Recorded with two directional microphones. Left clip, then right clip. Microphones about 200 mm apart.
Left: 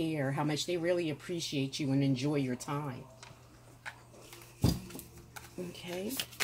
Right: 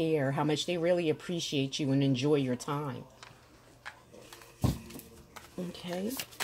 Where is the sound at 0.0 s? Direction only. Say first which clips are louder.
Right 5 dB; 40° right (ahead or behind).